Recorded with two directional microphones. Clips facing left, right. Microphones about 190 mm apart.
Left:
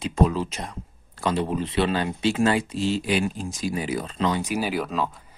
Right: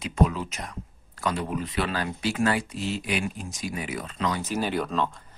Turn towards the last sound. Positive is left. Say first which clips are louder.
# left 1 dB
turn(degrees=5)  # may be behind; listen again after turning